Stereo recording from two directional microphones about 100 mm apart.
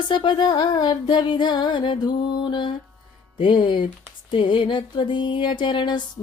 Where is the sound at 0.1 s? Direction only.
50° left (ahead or behind).